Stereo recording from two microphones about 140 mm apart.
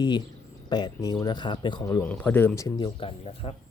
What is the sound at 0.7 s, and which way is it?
Speech, 30° left (ahead or behind).